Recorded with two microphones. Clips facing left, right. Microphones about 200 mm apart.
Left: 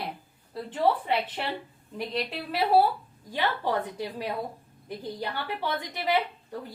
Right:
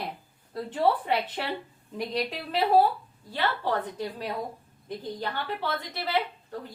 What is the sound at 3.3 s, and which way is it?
A woman's voice, 15° left (ahead or behind).